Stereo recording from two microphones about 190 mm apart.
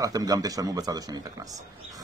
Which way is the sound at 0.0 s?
20° right (ahead or behind).